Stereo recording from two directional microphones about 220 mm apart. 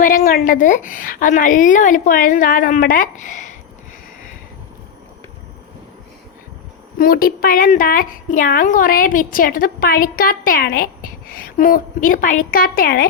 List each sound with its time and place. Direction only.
0.0 s a woman's voice: 40° left (ahead or behind)
7.0 s a woman's voice: 40° left (ahead or behind)